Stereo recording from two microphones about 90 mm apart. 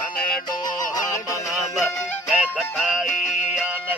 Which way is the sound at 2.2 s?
10° right (ahead or behind).